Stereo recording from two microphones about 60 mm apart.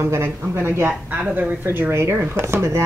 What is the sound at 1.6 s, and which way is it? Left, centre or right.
Speech, right.